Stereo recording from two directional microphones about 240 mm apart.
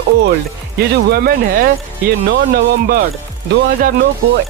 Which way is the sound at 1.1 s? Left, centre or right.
Right.